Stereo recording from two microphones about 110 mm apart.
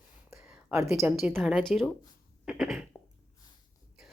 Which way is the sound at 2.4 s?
5° right (ahead or behind).